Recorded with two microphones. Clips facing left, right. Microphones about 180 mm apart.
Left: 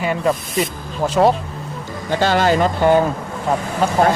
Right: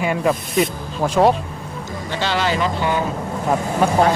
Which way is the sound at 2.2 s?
45° left (ahead or behind).